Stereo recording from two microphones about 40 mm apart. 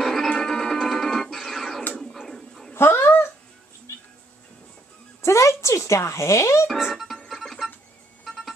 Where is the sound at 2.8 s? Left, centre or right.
Left.